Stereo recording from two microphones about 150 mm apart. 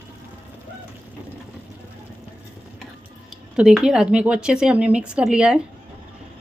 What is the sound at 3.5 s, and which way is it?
A woman's voice, 5° right (ahead or behind).